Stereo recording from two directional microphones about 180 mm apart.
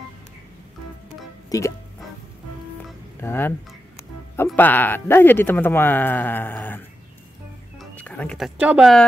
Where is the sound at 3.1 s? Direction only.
10° left (ahead or behind).